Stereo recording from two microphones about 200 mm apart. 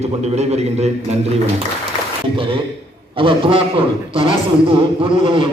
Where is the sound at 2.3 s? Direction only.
25° right (ahead or behind).